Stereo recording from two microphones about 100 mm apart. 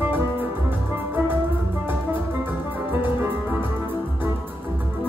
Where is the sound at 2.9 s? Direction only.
20° right (ahead or behind).